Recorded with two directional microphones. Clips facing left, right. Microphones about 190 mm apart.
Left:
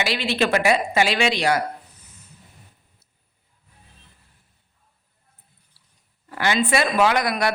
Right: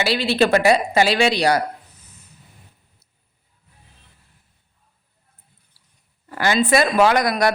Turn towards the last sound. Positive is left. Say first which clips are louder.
# right 3 dB
turn(degrees=-40)  # may be behind; listen again after turning